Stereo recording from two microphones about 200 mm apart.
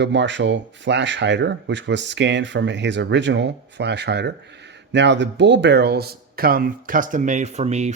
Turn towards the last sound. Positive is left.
turn(degrees=-35)  # may be behind; listen again after turning